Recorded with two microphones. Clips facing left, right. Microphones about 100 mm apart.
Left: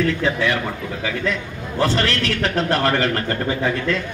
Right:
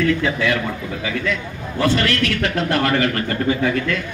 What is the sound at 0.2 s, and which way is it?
Speech, 30° left (ahead or behind).